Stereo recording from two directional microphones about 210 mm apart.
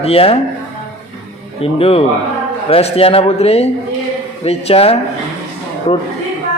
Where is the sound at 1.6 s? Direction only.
25° left (ahead or behind).